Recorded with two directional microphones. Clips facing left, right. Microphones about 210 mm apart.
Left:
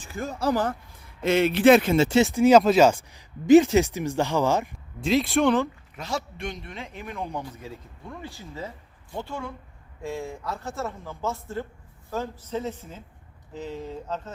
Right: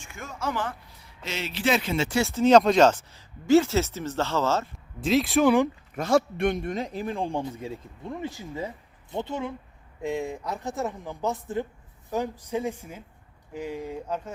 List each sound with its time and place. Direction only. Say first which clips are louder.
0.0 s speech: left 6 dB; 35° left (ahead or behind); by 2.0 s 50° left (ahead or behind)
2.3 s speech: right 1 dB; 10° left (ahead or behind)
4.9 s speech: even; centre (ahead or behind)
6.0 s a man's voice: right 9 dB; 50° right (ahead or behind); by 14.2 s 10° right (ahead or behind)